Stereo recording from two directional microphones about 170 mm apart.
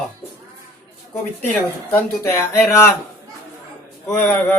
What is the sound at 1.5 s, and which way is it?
Speech, 10° left (ahead or behind).